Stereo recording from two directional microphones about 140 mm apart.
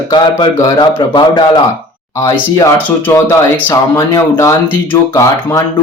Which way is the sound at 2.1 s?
20° left (ahead or behind).